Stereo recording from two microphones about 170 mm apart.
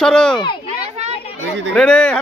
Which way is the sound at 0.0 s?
5° left (ahead or behind).